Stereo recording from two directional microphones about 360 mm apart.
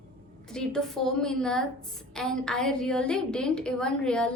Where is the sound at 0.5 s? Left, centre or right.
Centre.